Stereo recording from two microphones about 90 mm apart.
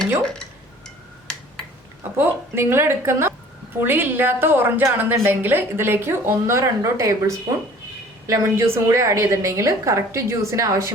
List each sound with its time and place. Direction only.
0.2 s speech: 5° left (ahead or behind)
0.9 s a sound: 5° left (ahead or behind)
2.1 s a woman's voice: 25° right (ahead or behind)
8.3 s a woman's voice: 30° right (ahead or behind)